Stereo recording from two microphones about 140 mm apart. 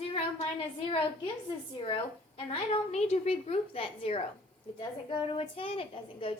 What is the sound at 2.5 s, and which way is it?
A woman's voice, 45° left (ahead or behind).